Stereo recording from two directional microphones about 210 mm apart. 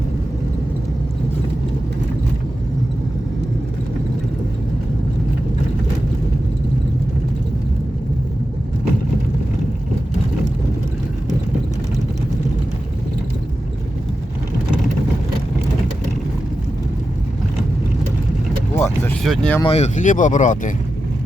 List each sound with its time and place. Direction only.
18.8 s vehicle: 10° left (ahead or behind)
19.3 s speech: 5° left (ahead or behind)
19.6 s speech: 30° left (ahead or behind)